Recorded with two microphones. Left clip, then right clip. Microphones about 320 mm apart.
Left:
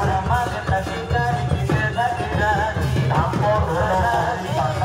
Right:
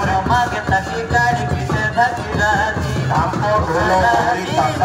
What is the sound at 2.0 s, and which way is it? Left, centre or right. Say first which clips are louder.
Music: right 7 dB; right.